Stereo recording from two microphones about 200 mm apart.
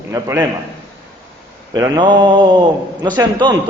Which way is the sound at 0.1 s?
15° right (ahead or behind).